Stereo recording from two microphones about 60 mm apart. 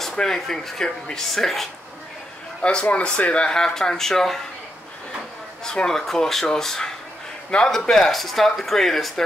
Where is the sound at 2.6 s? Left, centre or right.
Centre.